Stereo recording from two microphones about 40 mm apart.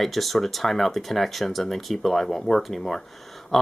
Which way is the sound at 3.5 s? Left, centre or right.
Centre.